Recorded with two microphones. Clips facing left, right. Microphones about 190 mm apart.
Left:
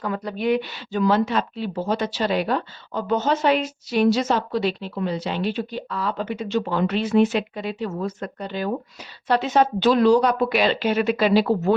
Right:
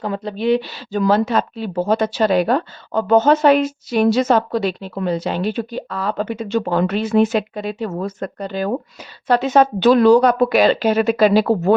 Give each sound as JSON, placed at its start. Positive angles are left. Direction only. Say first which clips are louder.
{"t": 0.0, "sound": "speech", "louder": "right 4 dB", "side_deg": -25}